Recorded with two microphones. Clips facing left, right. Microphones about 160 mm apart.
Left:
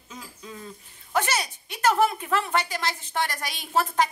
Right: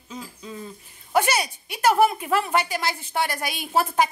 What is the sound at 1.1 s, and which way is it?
Speech, 10° right (ahead or behind).